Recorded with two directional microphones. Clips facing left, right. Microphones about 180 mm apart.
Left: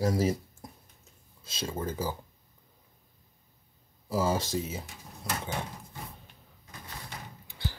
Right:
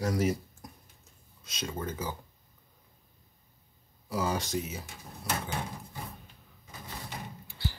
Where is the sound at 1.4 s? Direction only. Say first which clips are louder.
Left 2 dB; 30° left (ahead or behind).